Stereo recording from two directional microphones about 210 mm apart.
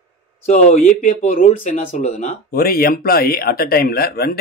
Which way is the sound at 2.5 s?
45° left (ahead or behind).